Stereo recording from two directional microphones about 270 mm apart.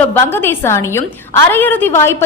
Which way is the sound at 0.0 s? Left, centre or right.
Centre.